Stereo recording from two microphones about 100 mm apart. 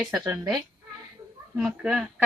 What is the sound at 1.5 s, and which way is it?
Speech, 5° right (ahead or behind).